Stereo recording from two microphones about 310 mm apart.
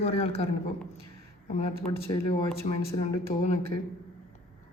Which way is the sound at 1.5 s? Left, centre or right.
Centre.